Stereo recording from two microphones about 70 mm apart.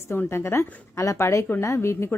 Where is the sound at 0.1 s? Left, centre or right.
Left.